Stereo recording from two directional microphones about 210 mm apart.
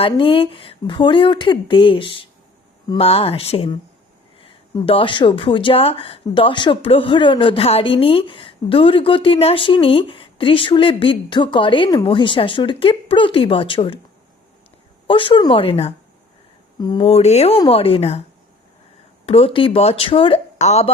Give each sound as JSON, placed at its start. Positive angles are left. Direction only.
{"t": 0.0, "sound": "a woman's voice", "side_deg": 25}
{"t": 15.0, "sound": "a woman's voice", "side_deg": 25}
{"t": 19.2, "sound": "a woman's voice", "side_deg": 25}